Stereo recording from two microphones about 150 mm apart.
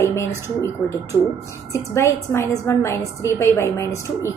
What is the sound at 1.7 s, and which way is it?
A woman's voice, 20° left (ahead or behind).